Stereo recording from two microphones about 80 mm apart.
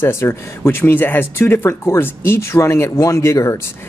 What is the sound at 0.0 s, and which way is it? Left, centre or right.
Speech, left.